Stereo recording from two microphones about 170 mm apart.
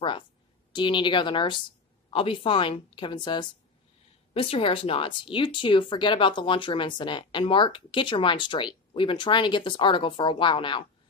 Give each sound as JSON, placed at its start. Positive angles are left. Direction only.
{"t": 0.7, "sound": "speech", "side_deg": 30}